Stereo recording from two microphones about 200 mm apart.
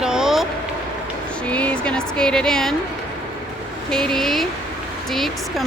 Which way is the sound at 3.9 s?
Centre (ahead or behind).